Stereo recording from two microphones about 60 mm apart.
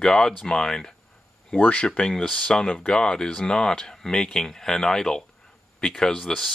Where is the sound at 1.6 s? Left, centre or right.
Left.